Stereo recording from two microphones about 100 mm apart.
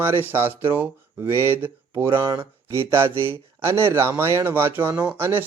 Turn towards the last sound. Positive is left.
turn(degrees=-20)  # may be behind; listen again after turning